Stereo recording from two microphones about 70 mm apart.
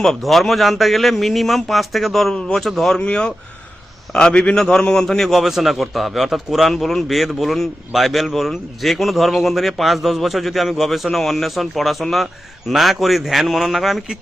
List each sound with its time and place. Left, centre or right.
0.0 s a man's voice: centre
3.0 s a man's voice: centre